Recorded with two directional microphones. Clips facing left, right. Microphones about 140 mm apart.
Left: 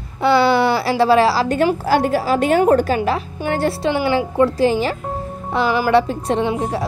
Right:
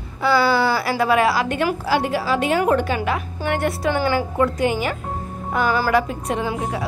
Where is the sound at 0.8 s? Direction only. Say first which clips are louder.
Left 4 dB; 30° left (ahead or behind).